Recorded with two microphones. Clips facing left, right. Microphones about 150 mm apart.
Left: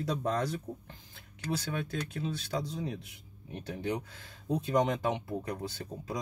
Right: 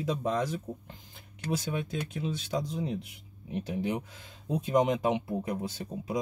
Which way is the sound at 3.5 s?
15° right (ahead or behind).